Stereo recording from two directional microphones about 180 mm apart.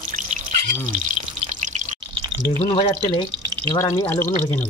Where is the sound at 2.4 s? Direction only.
15° left (ahead or behind).